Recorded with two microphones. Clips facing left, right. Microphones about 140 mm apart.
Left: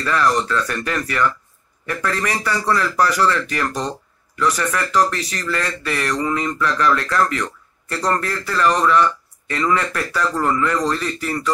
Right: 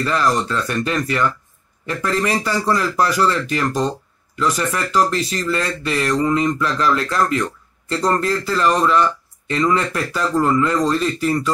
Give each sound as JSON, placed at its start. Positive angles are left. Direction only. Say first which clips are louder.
{"t": 0.0, "sound": "speech", "louder": "even", "side_deg": -20}